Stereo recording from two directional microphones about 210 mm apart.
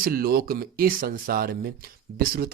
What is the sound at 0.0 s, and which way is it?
A man's voice, 45° right (ahead or behind).